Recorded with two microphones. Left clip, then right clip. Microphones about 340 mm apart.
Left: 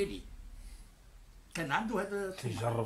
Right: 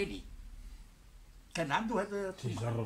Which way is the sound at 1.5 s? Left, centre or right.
Centre.